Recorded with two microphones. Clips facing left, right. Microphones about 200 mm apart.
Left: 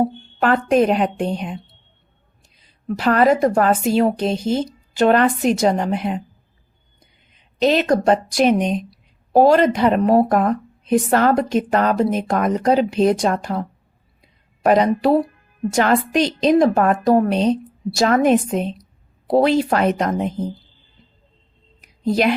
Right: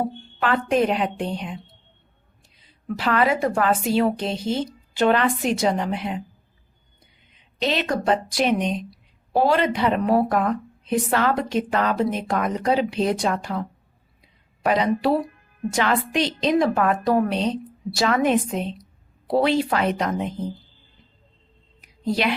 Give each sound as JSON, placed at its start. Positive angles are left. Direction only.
{"t": 0.3, "sound": "a woman's voice", "side_deg": 45}
{"t": 2.8, "sound": "a woman's voice", "side_deg": 45}
{"t": 7.6, "sound": "a woman's voice", "side_deg": 45}
{"t": 21.8, "sound": "a sound", "side_deg": 45}